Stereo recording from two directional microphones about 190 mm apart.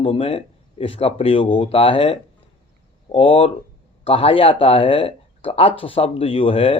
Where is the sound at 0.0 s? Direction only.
30° left (ahead or behind).